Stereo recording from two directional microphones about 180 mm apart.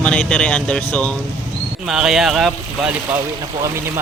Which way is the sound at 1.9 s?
Centre (ahead or behind).